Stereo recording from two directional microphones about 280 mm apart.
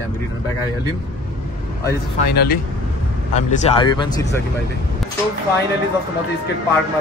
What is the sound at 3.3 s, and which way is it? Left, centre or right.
Speech, left.